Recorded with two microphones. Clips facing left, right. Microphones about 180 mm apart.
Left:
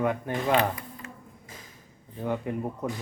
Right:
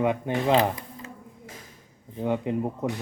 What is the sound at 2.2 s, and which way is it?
Speech, 20° right (ahead or behind).